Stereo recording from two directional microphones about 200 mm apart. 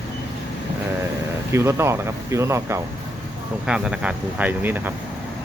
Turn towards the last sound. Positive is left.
turn(degrees=-10)  # may be behind; listen again after turning